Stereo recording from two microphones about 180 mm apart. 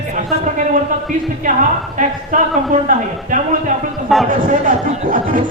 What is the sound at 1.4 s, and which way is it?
Speech, 45° right (ahead or behind).